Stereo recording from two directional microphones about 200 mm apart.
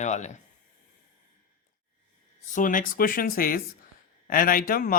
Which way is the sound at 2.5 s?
40° left (ahead or behind).